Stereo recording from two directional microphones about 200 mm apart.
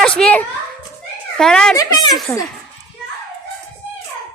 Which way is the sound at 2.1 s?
Centre (ahead or behind).